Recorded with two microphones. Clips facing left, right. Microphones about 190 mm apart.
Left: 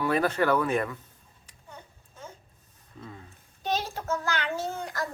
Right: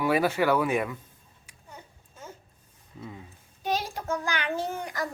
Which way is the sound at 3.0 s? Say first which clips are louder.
Right 2 dB; 10° right (ahead or behind).